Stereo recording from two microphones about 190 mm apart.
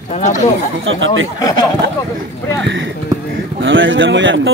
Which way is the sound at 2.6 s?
70° right (ahead or behind).